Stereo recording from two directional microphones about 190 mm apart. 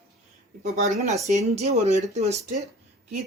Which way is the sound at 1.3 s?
35° right (ahead or behind).